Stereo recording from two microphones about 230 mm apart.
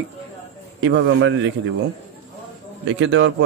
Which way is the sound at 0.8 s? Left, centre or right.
Right.